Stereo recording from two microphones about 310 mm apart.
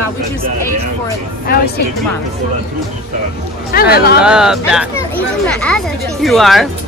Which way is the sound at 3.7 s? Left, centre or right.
Left.